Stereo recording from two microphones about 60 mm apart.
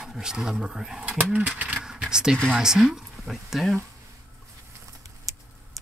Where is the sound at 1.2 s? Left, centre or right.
Right.